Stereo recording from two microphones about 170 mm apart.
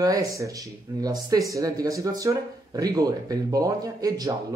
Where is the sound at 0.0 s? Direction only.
20° right (ahead or behind).